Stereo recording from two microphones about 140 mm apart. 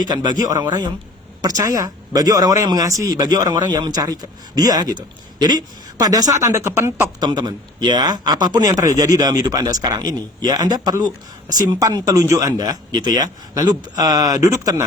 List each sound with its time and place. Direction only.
0.1 s a woman's voice: 30° right (ahead or behind)
7.2 s speech: 30° right (ahead or behind)